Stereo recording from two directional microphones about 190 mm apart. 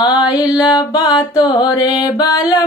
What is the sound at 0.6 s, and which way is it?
Music, 20° left (ahead or behind).